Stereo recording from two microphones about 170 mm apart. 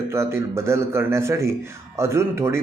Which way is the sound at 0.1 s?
15° right (ahead or behind).